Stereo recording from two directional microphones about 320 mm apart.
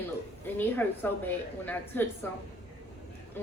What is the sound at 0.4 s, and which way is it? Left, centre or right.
A woman's voice, centre.